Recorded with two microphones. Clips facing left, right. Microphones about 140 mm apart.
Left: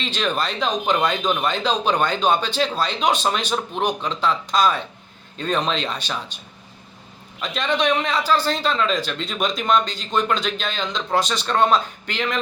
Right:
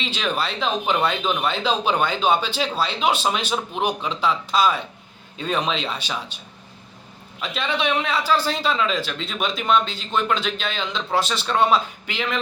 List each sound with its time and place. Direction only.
0.0 s a man's voice: 5° right (ahead or behind)
7.4 s a man's voice: 5° right (ahead or behind)